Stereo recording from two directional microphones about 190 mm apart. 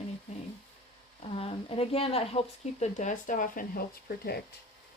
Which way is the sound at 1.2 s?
30° left (ahead or behind).